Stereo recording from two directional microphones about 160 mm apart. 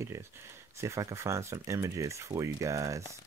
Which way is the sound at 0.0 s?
15° right (ahead or behind).